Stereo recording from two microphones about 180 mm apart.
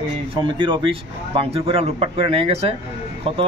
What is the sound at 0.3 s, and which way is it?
A man's voice, 25° right (ahead or behind).